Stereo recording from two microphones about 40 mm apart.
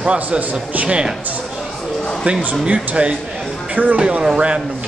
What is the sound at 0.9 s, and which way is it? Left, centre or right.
Speech, right.